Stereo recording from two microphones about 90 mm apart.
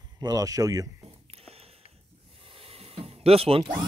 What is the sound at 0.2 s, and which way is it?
Speech, 45° right (ahead or behind).